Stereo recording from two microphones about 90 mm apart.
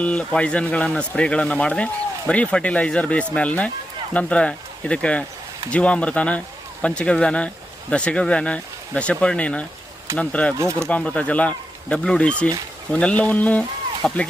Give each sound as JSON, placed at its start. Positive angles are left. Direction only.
{"t": 0.0, "sound": "speech", "side_deg": 15}
{"t": 10.6, "sound": "speech", "side_deg": -35}
{"t": 10.8, "sound": "speech", "side_deg": 10}